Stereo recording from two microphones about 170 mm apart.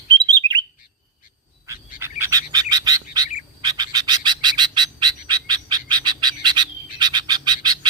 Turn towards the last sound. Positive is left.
turn(degrees=-25)  # may be behind; listen again after turning